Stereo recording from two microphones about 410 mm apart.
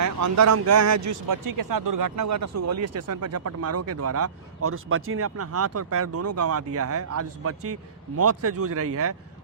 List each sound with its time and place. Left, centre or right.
0.0 s a man's voice: right